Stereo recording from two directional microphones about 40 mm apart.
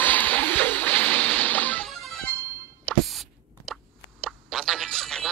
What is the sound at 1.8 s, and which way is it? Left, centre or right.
Music, centre.